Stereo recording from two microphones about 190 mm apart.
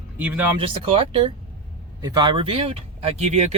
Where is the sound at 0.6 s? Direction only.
30° right (ahead or behind).